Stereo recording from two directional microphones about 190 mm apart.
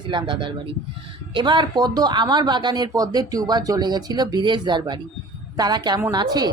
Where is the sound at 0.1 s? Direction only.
25° right (ahead or behind).